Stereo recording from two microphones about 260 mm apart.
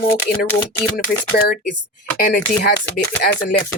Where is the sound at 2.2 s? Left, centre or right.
Left.